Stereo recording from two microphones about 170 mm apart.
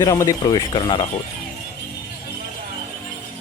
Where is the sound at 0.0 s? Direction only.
20° left (ahead or behind).